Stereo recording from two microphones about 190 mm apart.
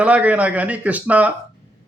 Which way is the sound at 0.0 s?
5° right (ahead or behind).